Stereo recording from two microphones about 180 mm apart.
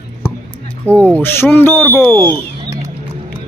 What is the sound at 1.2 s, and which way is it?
Speech, 10° left (ahead or behind).